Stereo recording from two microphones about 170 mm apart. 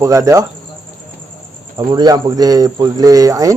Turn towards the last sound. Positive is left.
turn(degrees=-20)  # may be behind; listen again after turning